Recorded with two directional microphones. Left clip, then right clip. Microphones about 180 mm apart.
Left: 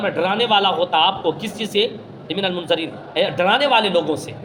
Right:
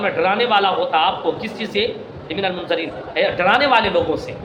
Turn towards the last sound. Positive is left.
turn(degrees=45)  # may be behind; listen again after turning